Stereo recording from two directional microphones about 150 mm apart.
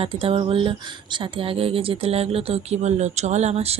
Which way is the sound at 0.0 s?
40° right (ahead or behind).